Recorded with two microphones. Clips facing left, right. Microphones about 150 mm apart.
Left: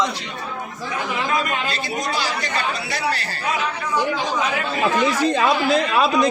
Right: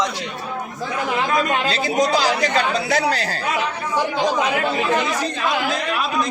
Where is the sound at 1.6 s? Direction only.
90° right.